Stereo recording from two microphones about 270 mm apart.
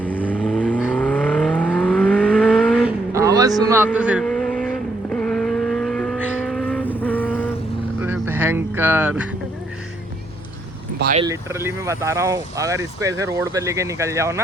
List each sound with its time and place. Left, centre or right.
0.3 s vehicle: centre
3.1 s vehicle: centre
8.0 s a sound: centre
10.9 s speech: right
11.2 s speech: centre